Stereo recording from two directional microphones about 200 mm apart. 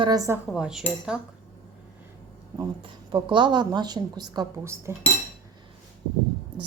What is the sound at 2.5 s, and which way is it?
A woman's voice, 25° right (ahead or behind).